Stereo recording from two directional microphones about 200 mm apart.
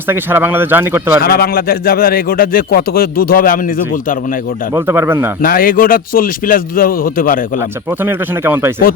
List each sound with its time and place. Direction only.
0.1 s speech: 10° right (ahead or behind)
1.2 s a man's voice: 50° left (ahead or behind)
4.7 s speech: 10° right (ahead or behind)
5.4 s a man's voice: 45° left (ahead or behind)
7.9 s speech: 10° right (ahead or behind)